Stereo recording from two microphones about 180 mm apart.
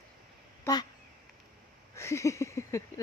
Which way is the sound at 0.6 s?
20° left (ahead or behind).